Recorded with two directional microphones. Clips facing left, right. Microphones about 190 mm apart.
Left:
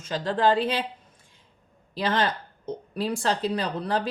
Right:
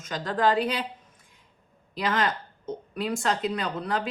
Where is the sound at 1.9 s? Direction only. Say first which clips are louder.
Left 1 dB; 30° left (ahead or behind).